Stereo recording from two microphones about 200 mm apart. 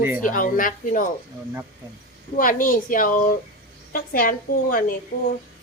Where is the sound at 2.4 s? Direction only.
45° left (ahead or behind).